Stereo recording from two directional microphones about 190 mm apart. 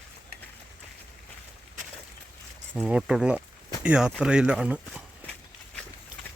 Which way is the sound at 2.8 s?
5° right (ahead or behind).